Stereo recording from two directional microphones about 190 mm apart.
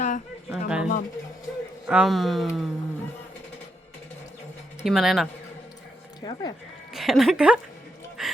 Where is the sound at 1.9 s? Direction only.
Centre (ahead or behind).